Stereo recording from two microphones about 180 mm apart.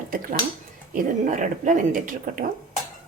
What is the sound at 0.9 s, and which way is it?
Speech, 45° right (ahead or behind).